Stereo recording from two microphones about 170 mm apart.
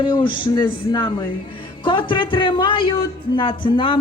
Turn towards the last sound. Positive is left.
turn(degrees=30)  # may be behind; listen again after turning